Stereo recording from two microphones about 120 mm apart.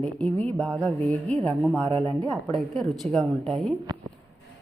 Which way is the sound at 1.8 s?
35° right (ahead or behind).